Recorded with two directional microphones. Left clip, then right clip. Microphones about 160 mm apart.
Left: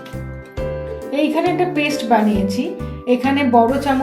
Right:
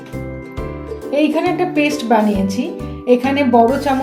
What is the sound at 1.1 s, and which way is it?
A woman's voice, 30° right (ahead or behind).